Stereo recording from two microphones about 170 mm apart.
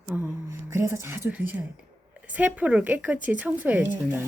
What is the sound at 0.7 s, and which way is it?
Speech, 15° right (ahead or behind).